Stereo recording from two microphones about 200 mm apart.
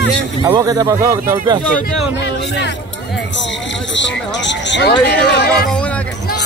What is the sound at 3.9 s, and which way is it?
Speech, 65° left (ahead or behind).